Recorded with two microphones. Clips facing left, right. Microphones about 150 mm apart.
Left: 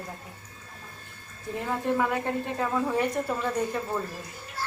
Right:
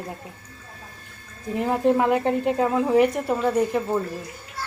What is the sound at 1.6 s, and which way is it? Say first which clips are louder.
A woman's voice: right 7 dB; 25° right (ahead or behind).